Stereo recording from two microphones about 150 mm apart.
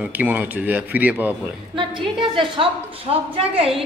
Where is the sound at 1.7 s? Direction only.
35° right (ahead or behind).